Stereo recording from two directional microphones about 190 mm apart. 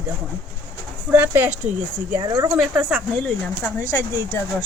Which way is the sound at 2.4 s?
5° right (ahead or behind).